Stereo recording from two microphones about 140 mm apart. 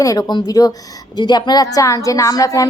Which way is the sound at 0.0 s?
25° left (ahead or behind).